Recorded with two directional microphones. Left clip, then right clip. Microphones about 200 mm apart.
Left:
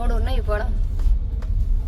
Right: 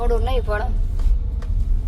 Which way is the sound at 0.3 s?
15° left (ahead or behind).